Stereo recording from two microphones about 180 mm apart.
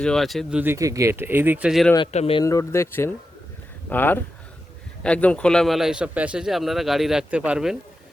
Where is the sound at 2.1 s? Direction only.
35° left (ahead or behind).